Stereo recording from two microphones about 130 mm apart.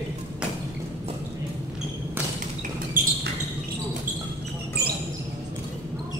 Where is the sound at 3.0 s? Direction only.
90° right.